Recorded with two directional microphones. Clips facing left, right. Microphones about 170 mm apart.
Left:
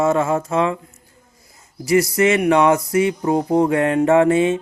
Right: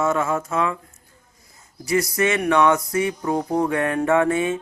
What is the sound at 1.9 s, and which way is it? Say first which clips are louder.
Music: left 5 dB; 30° left (ahead or behind).